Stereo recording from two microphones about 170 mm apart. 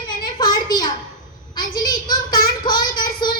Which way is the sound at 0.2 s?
25° left (ahead or behind).